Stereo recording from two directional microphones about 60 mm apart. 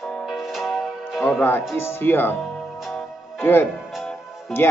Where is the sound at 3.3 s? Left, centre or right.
Left.